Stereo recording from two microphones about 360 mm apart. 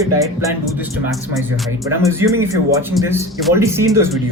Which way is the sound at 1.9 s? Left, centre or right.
Centre.